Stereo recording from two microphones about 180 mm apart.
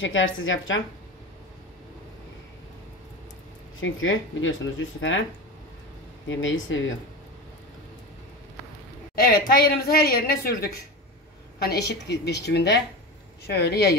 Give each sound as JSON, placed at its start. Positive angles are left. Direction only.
{"t": 0.0, "sound": "speech", "side_deg": 90}
{"t": 3.8, "sound": "speech", "side_deg": 90}
{"t": 6.2, "sound": "speech", "side_deg": 90}
{"t": 9.1, "sound": "a woman's voice", "side_deg": 55}
{"t": 11.6, "sound": "a woman's voice", "side_deg": 65}